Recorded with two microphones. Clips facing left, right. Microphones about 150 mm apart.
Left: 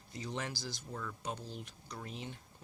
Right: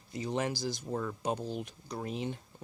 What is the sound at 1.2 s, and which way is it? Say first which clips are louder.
Speech: right 8 dB; 60° right (ahead or behind).